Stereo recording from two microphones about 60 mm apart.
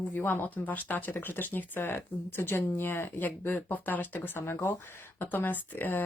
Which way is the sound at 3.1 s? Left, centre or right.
Left.